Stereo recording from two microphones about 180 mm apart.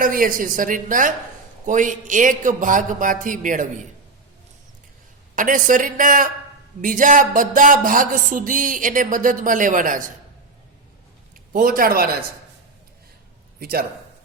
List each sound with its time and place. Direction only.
0.0 s music: 50° right (ahead or behind)
5.3 s music: 45° right (ahead or behind)
11.5 s music: 50° right (ahead or behind)
13.6 s a man's voice: 55° right (ahead or behind)